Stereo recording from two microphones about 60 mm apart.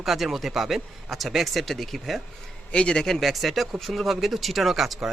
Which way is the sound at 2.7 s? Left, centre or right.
Centre.